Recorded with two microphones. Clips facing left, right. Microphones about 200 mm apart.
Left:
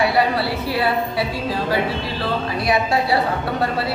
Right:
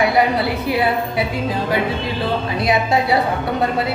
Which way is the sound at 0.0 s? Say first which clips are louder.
Right 2 dB; 20° right (ahead or behind).